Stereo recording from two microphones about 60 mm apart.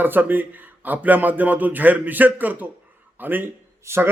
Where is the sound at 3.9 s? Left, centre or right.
Right.